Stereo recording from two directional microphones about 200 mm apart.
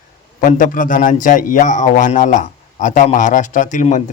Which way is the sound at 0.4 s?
40° left (ahead or behind).